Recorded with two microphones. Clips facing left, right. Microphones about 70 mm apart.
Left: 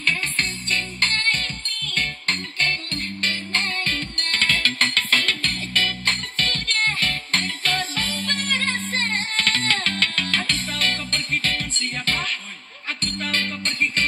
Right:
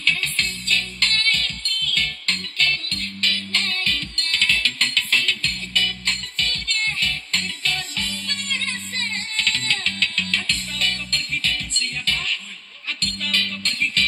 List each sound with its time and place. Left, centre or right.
0.0 s music: left
13.0 s music: left